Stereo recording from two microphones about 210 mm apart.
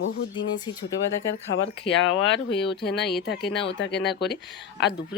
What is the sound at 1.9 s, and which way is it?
Speech, 25° left (ahead or behind).